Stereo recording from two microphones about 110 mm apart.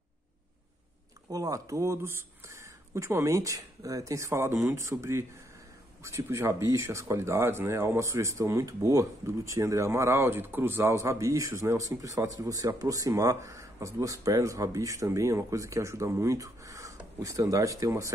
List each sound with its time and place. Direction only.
1.3 s speech: 30° right (ahead or behind)